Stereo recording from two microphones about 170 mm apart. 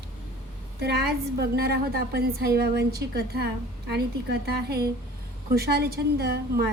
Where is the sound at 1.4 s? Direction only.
70° right (ahead or behind).